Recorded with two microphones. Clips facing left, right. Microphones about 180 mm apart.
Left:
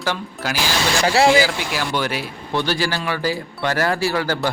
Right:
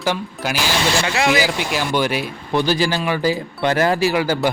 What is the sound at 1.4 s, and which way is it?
Speech, 20° right (ahead or behind).